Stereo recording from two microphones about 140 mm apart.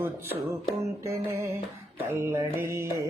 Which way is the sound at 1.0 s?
20° right (ahead or behind).